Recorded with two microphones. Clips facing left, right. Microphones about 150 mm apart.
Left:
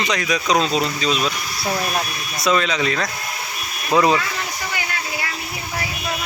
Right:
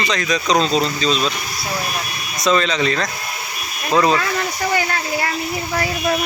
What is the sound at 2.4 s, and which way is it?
Speech, 5° left (ahead or behind).